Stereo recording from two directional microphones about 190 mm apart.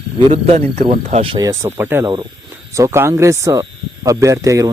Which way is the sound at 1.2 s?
25° right (ahead or behind).